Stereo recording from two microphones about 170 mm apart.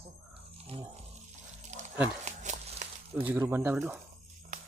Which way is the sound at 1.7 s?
40° right (ahead or behind).